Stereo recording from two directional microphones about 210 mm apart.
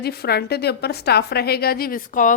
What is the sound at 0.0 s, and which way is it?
A woman's voice, 50° left (ahead or behind).